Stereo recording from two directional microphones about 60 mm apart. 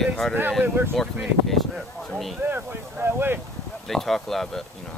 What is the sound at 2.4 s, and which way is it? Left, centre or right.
Speech, right.